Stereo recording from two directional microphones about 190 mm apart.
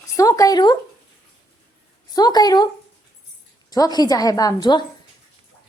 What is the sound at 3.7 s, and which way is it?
A woman's voice, 20° left (ahead or behind).